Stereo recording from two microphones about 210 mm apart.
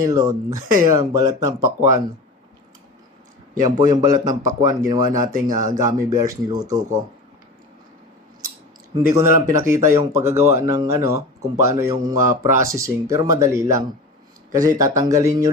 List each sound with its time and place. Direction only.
0.0 s a man's voice: 15° right (ahead or behind)
3.5 s a man's voice: 20° right (ahead or behind)
9.1 s a man's voice: 15° right (ahead or behind)